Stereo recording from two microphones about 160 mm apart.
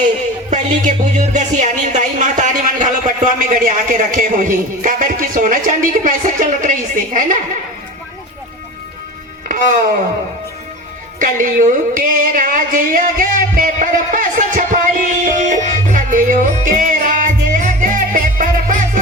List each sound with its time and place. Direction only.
0.5 s speech: 50° right (ahead or behind)
9.5 s music: 55° right (ahead or behind)
11.2 s speech: 55° right (ahead or behind)
15.2 s music: 55° right (ahead or behind)